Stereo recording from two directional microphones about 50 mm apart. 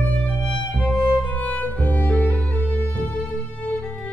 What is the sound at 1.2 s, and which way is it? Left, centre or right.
Music, left.